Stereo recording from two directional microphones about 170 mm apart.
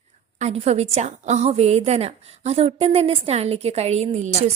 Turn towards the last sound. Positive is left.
turn(degrees=-40)  # may be behind; listen again after turning